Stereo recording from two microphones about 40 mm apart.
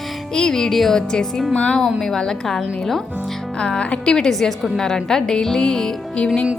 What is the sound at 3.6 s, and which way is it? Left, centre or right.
A woman's voice, left.